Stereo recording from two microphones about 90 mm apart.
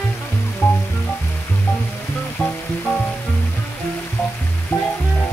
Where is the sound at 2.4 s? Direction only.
15° left (ahead or behind).